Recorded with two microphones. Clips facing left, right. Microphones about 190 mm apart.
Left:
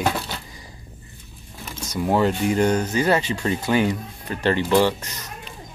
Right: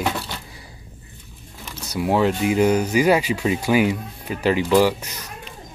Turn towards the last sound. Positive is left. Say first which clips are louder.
# right 2 dB
turn(degrees=-10)  # may be behind; listen again after turning